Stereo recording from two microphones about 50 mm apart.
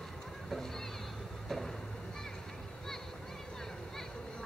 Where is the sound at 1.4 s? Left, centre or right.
Centre.